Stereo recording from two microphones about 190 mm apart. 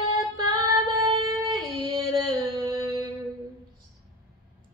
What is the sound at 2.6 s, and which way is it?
Music, 15° right (ahead or behind).